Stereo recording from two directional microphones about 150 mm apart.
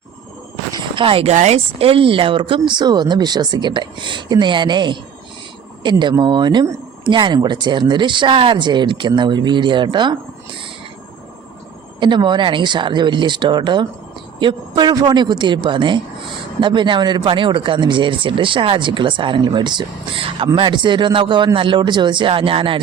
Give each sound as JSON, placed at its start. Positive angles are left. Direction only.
{"t": 0.7, "sound": "speech", "side_deg": -35}
{"t": 11.9, "sound": "a woman's voice", "side_deg": -30}